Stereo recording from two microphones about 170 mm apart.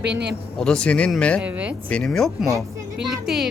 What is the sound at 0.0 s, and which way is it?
Speech, 75° right (ahead or behind).